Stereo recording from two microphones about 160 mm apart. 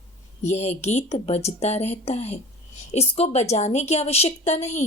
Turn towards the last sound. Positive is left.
turn(degrees=45)  # may be behind; listen again after turning